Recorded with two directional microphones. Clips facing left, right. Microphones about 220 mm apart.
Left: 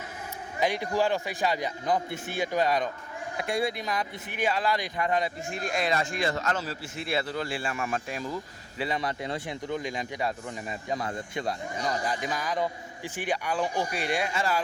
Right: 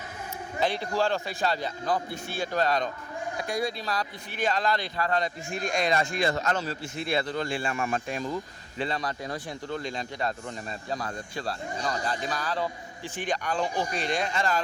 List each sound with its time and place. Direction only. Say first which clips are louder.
0.6 s speech: left 1 dB; 15° left (ahead or behind)
3.3 s speech: left 2 dB; 25° left (ahead or behind); by 8.4 s 5° left (ahead or behind)
9.0 s speech: left 1 dB; 25° left (ahead or behind); by 14.6 s 10° left (ahead or behind)